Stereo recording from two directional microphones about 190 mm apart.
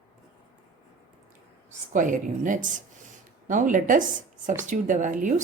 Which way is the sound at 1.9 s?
45° right (ahead or behind).